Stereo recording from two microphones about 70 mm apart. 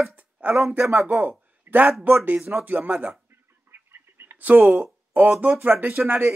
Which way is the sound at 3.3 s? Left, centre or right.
Right.